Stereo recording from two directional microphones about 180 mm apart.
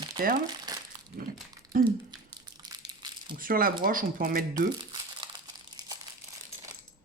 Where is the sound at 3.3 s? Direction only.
50° right (ahead or behind).